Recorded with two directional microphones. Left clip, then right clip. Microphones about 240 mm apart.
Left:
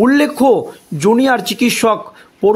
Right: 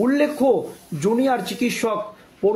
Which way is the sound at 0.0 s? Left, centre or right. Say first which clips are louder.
Left 7 dB; left.